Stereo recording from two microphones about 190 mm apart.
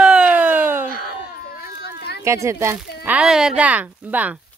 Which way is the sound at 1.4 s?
55° left (ahead or behind).